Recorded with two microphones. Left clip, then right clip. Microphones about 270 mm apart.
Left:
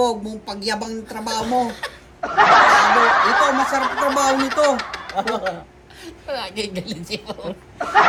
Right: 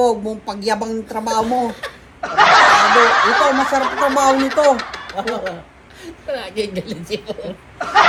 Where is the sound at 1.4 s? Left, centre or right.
Centre.